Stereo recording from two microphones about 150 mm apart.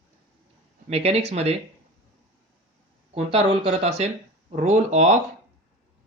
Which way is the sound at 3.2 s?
40° right (ahead or behind).